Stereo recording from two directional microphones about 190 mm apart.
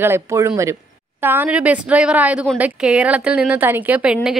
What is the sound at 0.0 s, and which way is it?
A woman's voice, 15° right (ahead or behind).